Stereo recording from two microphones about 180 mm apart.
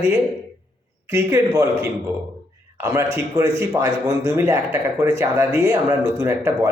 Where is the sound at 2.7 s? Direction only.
15° right (ahead or behind).